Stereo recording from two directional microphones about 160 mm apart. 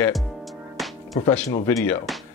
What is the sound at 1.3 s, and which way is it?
Speech, 15° left (ahead or behind).